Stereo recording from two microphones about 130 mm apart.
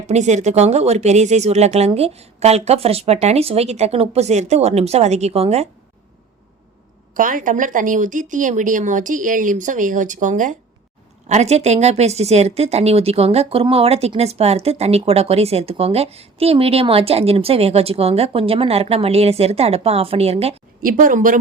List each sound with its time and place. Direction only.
0.1 s speech: 65° right (ahead or behind)
7.1 s speech: 90° right
11.3 s speech: 60° right (ahead or behind)
20.8 s speech: 90° right